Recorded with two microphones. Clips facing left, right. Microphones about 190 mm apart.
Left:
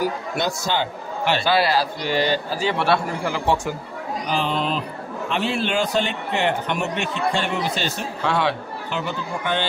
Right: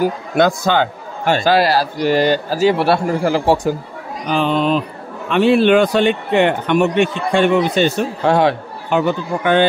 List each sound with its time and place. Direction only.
1.2 s a man's voice: 45° right (ahead or behind)
4.3 s a man's voice: 60° right (ahead or behind)
8.2 s a man's voice: 45° right (ahead or behind)